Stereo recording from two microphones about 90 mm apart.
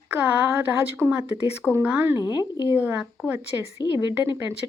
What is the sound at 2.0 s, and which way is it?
Speech, 30° right (ahead or behind).